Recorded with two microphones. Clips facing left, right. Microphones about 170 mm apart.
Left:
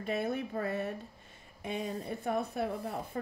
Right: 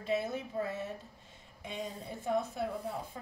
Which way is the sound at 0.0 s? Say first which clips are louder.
Left 1 dB; 60° left (ahead or behind).